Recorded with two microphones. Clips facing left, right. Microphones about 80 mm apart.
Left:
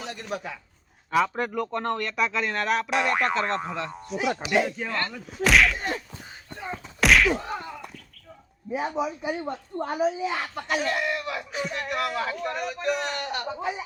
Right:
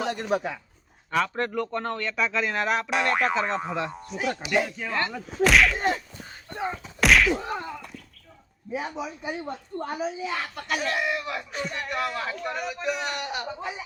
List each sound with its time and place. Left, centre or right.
0.1 s speech: right
1.1 s speech: centre
4.2 s speech: centre
4.9 s speech: centre
5.4 s speech: centre
6.8 s a sound: centre
9.0 s speech: centre
9.7 s a woman's voice: centre
10.8 s speech: centre
13.6 s speech: centre